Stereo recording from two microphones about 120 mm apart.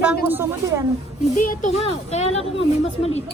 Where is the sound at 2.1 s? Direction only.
60° left (ahead or behind).